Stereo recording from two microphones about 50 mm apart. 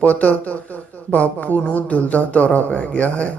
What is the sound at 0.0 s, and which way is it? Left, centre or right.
Speech, left.